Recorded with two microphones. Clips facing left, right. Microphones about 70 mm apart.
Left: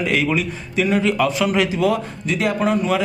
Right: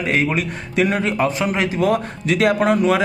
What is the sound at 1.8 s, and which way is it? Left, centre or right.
Speech, right.